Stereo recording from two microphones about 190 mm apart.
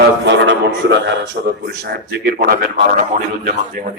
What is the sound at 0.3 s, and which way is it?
A man's voice, 70° right (ahead or behind).